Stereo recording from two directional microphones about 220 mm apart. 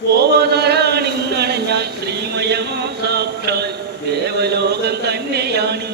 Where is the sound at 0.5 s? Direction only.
50° right (ahead or behind).